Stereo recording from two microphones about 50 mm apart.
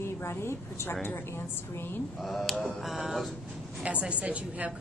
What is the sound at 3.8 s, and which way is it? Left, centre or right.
Speech, right.